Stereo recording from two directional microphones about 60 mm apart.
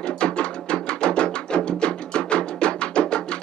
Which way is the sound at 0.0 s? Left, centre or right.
Centre.